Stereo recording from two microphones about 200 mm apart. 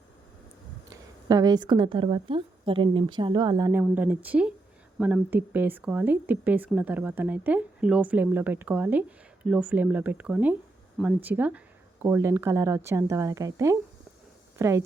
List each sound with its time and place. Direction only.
0.9 s a woman's voice: 20° right (ahead or behind)
3.7 s speech: 10° right (ahead or behind)